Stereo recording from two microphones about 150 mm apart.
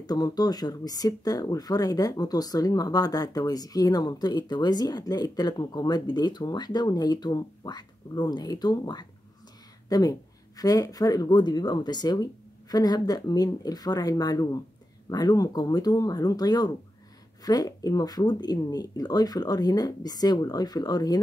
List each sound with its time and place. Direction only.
0.0 s speech: 25° left (ahead or behind)